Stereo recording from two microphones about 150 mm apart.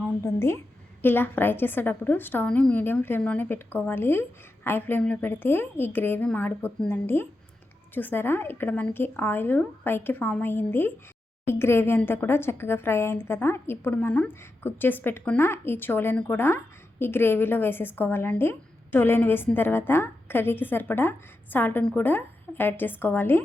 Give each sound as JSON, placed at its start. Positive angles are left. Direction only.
{"t": 0.3, "sound": "a woman's voice", "side_deg": 15}